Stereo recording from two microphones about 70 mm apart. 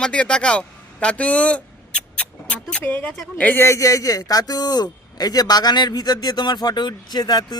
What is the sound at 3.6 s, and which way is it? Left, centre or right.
Speech, left.